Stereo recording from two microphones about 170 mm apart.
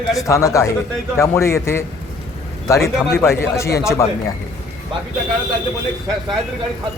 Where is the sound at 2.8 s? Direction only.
Centre (ahead or behind).